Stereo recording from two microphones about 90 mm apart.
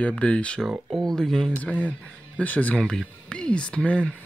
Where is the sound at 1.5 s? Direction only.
15° left (ahead or behind).